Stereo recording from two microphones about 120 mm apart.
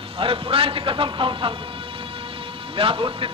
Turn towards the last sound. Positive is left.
turn(degrees=-45)  # may be behind; listen again after turning